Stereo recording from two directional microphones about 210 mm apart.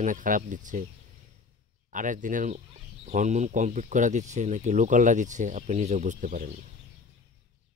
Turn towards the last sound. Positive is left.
turn(degrees=-40)  # may be behind; listen again after turning